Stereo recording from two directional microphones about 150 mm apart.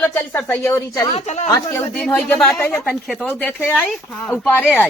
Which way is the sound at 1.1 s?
50° left (ahead or behind).